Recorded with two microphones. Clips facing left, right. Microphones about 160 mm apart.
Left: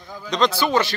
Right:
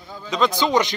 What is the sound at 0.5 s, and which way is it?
Speech, 15° right (ahead or behind).